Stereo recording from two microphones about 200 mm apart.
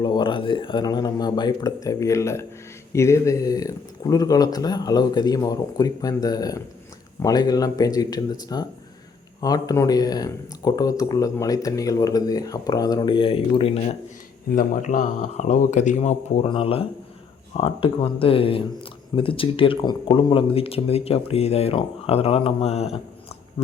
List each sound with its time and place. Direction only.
0.0 s speech: 25° left (ahead or behind)
14.5 s speech: 40° left (ahead or behind)
23.6 s a sound: 30° left (ahead or behind)